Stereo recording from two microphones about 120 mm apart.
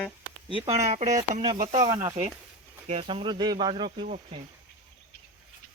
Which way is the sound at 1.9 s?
80° right.